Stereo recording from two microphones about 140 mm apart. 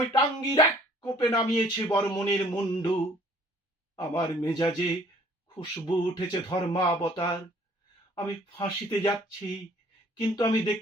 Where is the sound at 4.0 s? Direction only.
30° left (ahead or behind).